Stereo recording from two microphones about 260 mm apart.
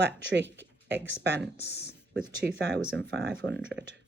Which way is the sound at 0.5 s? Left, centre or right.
Right.